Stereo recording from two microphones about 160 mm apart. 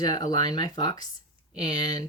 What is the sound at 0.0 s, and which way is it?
Speech, 25° left (ahead or behind).